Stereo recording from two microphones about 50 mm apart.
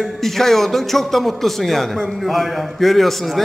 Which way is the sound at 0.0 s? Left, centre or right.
Centre.